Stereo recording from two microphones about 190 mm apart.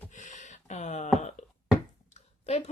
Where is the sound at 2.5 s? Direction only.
35° left (ahead or behind).